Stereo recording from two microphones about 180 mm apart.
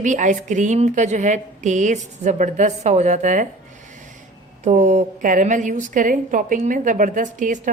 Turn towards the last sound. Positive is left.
turn(degrees=-45)  # may be behind; listen again after turning